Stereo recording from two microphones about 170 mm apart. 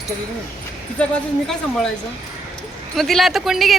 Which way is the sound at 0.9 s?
5° left (ahead or behind).